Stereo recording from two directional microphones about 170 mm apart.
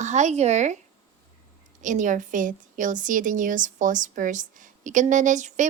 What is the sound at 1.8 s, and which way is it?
A woman's voice, 50° right (ahead or behind).